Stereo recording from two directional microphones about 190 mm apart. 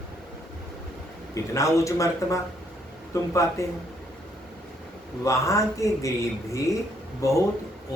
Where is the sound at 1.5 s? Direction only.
15° left (ahead or behind).